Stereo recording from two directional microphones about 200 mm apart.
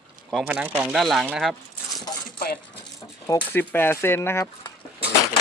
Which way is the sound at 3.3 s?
15° left (ahead or behind).